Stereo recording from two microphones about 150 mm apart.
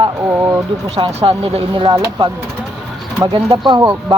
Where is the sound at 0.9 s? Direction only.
40° right (ahead or behind).